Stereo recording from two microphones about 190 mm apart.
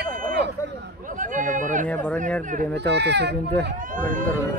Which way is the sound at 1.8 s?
5° left (ahead or behind).